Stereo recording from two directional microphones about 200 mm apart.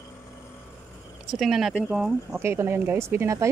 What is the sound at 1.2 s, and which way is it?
Speech, centre (ahead or behind).